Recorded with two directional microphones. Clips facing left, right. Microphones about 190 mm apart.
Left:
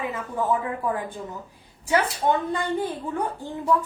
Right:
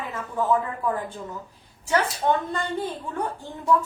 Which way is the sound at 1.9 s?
15° left (ahead or behind).